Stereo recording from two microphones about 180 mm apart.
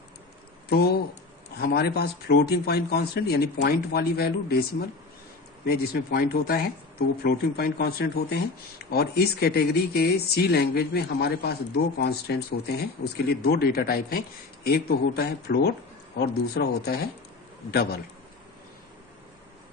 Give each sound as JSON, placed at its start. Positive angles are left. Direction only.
{"t": 0.7, "sound": "speech", "side_deg": 60}
{"t": 5.6, "sound": "speech", "side_deg": 60}